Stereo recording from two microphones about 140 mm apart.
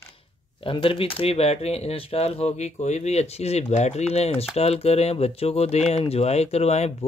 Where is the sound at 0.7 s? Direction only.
40° left (ahead or behind).